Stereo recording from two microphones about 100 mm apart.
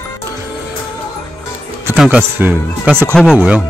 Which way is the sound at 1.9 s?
10° right (ahead or behind).